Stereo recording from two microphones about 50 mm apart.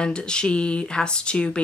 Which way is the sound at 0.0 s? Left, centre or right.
Centre.